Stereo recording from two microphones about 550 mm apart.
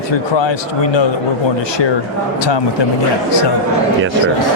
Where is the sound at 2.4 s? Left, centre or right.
Left.